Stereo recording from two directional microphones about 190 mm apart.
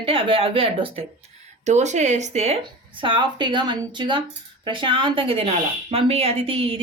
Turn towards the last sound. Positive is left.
turn(degrees=-30)  # may be behind; listen again after turning